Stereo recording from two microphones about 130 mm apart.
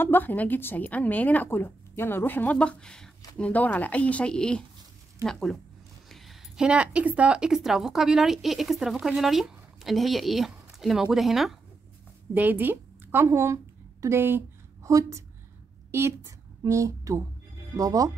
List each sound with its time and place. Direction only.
0.0 s a woman's voice: 15° left (ahead or behind); by 11.5 s centre (ahead or behind)
12.4 s a woman's voice: 15° right (ahead or behind)